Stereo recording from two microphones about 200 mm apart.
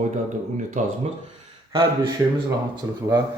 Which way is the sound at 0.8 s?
40° right (ahead or behind).